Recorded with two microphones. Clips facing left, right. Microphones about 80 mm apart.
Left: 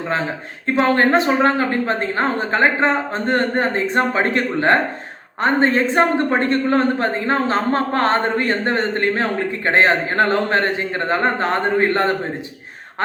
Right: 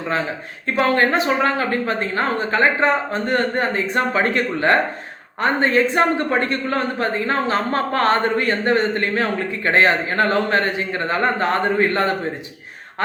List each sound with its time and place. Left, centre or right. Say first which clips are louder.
0.8 s a woman's voice: left 2 dB; left